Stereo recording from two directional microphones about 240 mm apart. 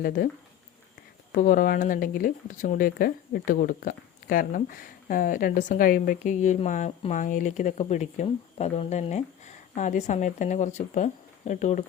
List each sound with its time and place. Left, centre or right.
1.3 s speech: left